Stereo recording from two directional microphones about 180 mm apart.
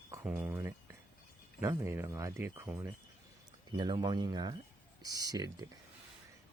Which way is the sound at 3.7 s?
25° right (ahead or behind).